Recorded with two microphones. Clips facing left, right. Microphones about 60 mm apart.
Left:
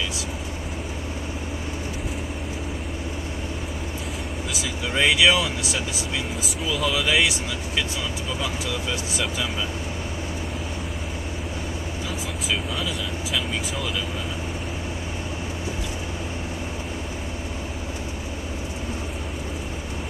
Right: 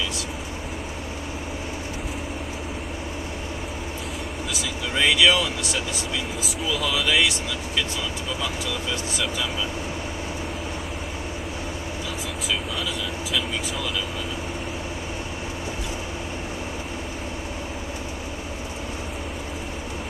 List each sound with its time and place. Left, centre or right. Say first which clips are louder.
4.9 s speech: even; centre
6.4 s speech: left 1 dB; centre